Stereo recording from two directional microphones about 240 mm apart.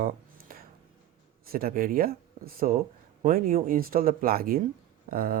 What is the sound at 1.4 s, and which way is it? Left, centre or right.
Speech, right.